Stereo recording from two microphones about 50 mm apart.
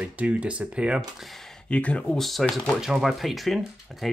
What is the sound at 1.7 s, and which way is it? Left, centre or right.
Speech, left.